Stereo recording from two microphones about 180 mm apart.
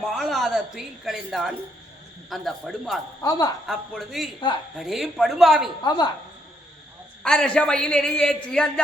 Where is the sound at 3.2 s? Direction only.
20° left (ahead or behind).